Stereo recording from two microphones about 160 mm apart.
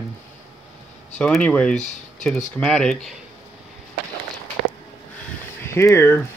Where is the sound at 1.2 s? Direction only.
5° left (ahead or behind).